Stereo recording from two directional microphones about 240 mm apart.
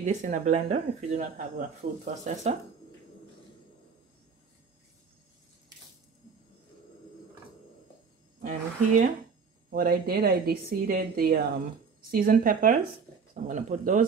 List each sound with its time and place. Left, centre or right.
0.0 s speech: right
8.4 s speech: right